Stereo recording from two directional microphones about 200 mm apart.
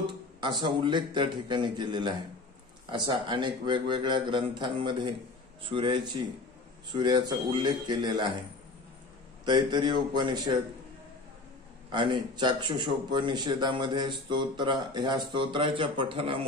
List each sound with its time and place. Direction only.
0.0 s a man's voice: 20° right (ahead or behind)
9.4 s a man's voice: 20° right (ahead or behind)
11.9 s a man's voice: 25° right (ahead or behind)